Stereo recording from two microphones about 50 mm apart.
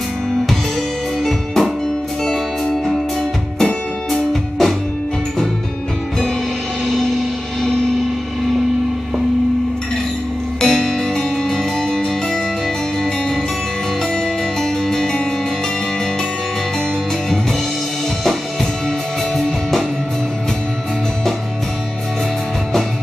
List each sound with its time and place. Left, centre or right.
1.2 s music: centre
4.1 s music: centre
10.6 s music: centre
14.1 s music: centre